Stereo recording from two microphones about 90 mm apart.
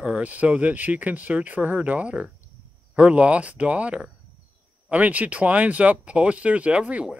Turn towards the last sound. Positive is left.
turn(degrees=-15)  # may be behind; listen again after turning